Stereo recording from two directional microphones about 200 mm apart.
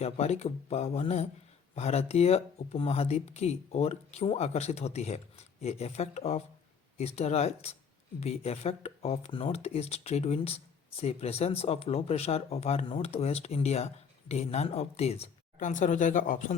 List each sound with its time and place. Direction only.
0.0 s speech: 30° left (ahead or behind)